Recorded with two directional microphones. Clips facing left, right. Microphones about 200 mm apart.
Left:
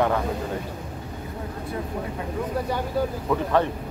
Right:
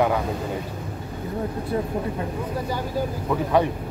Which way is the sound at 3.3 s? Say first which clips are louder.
Right 2 dB; 10° right (ahead or behind).